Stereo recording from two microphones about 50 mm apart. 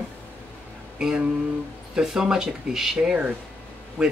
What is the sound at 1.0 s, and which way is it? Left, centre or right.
Music, centre.